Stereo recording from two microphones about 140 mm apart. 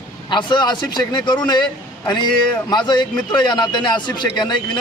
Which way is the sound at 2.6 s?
30° left (ahead or behind).